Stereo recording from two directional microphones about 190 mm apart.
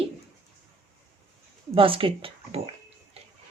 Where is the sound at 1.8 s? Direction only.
25° right (ahead or behind).